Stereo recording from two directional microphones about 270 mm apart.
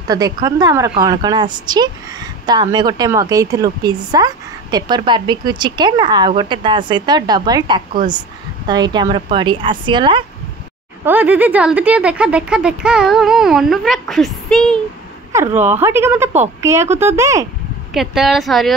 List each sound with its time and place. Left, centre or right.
0.1 s speech: centre
11.1 s speech: centre
15.3 s speech: centre